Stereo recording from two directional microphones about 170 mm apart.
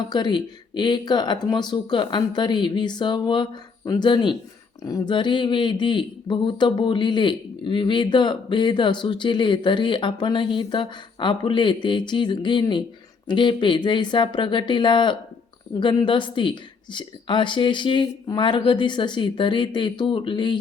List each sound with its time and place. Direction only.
0.1 s speech: 25° left (ahead or behind)